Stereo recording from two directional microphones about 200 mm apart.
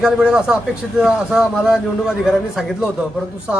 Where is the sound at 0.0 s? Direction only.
5° right (ahead or behind).